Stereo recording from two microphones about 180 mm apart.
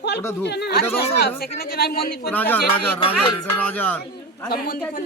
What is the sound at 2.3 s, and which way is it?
Speech, 10° left (ahead or behind).